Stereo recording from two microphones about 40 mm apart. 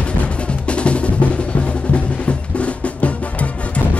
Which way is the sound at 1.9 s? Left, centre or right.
Left.